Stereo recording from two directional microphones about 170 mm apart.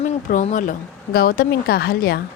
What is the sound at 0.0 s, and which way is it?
Speech, 50° left (ahead or behind).